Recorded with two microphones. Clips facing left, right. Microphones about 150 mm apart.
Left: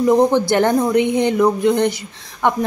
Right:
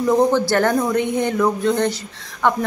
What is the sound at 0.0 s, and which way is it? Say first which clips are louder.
A woman's voice: left 2 dB; 20° left (ahead or behind).